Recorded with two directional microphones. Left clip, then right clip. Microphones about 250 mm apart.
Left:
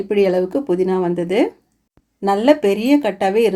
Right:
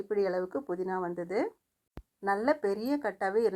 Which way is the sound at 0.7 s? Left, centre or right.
Right.